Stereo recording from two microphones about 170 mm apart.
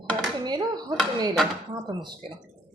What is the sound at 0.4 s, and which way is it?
Speech, 25° right (ahead or behind).